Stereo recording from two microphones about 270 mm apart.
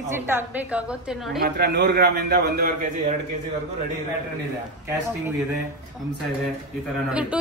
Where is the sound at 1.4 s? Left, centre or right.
Right.